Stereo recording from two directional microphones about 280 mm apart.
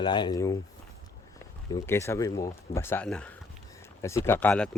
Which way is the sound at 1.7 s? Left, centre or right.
Centre.